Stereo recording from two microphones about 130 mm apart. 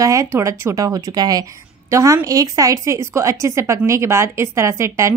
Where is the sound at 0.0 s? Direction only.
25° right (ahead or behind).